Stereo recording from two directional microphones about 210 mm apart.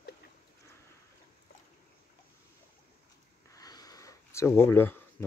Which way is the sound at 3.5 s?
15° left (ahead or behind).